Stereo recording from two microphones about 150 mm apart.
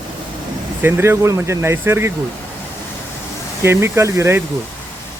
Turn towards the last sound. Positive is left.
turn(degrees=-20)  # may be behind; listen again after turning